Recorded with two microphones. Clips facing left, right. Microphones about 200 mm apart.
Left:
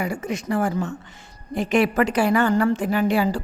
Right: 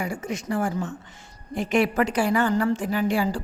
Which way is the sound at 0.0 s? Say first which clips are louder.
Left 3 dB; 65° left (ahead or behind).